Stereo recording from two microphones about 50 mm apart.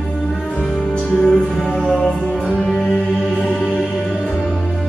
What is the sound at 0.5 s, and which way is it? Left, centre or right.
Music, centre.